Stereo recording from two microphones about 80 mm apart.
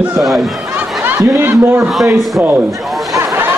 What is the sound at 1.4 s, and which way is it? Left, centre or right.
A man's voice, right.